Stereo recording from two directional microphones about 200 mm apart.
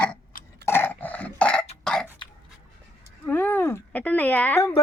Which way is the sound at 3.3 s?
10° left (ahead or behind).